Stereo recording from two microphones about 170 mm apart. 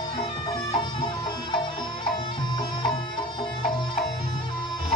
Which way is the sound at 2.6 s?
30° left (ahead or behind).